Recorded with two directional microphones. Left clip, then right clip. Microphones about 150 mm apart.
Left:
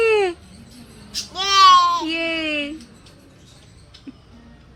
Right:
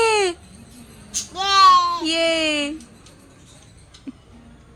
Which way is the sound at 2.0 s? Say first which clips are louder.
Right 4 dB; 40° right (ahead or behind).